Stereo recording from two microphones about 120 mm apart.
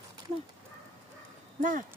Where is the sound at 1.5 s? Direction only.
90° right.